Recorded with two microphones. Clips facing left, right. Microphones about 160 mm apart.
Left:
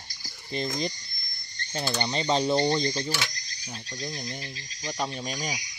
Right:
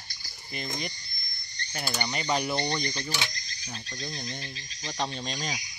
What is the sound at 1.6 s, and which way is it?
Cricket, 50° left (ahead or behind).